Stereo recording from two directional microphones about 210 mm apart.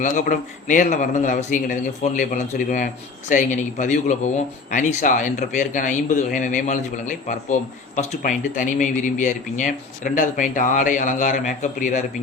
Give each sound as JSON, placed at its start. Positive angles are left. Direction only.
{"t": 0.0, "sound": "a man's voice", "side_deg": 35}